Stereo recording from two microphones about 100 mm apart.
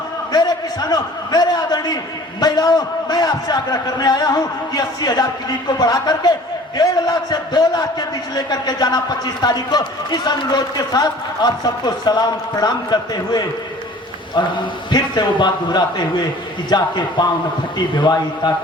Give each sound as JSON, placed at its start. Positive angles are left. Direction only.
{"t": 0.3, "sound": "a man's voice", "side_deg": 40}